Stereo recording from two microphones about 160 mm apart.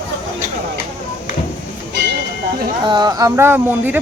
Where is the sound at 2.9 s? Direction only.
25° right (ahead or behind).